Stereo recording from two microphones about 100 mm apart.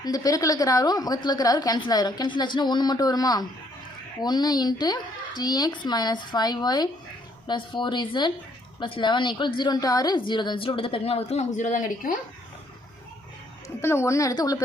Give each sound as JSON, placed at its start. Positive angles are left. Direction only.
{"t": 0.0, "sound": "a woman's voice", "side_deg": 40}
{"t": 10.2, "sound": "a woman's voice", "side_deg": 50}
{"t": 13.8, "sound": "a woman's voice", "side_deg": 25}